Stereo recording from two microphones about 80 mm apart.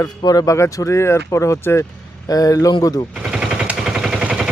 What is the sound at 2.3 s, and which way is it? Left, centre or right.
Speech, left.